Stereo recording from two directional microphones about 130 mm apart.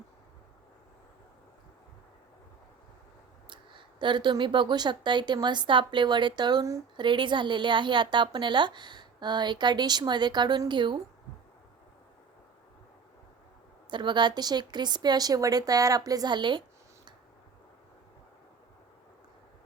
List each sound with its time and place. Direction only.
3.5 s a woman's voice: 40° right (ahead or behind)
13.9 s a woman's voice: 35° right (ahead or behind)